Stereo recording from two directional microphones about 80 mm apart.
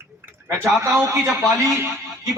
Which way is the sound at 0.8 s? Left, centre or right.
Right.